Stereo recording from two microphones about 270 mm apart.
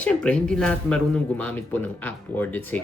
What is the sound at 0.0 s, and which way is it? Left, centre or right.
Speech, centre.